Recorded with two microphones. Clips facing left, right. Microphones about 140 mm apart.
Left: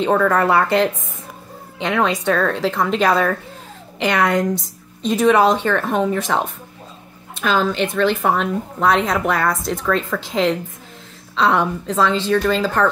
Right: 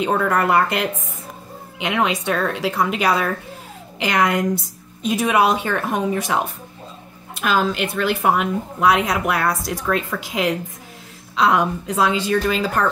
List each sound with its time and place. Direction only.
0.0 s speech: 10° right (ahead or behind)